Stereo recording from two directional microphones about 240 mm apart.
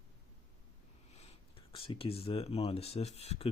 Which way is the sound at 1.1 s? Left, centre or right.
Left.